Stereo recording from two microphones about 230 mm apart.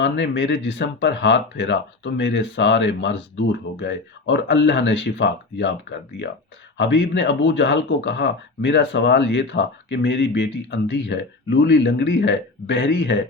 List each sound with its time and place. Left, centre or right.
0.0 s speech: left